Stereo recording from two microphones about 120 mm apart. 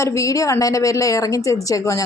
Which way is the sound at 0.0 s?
25° left (ahead or behind).